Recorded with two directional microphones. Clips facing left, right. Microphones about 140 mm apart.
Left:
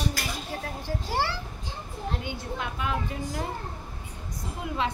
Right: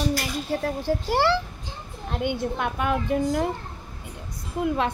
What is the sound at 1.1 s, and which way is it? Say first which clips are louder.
Speech: right 7 dB; 80° right.